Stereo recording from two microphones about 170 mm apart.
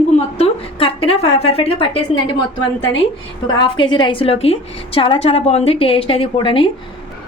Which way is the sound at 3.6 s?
25° left (ahead or behind).